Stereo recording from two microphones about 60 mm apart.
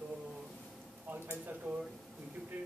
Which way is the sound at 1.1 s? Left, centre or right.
Right.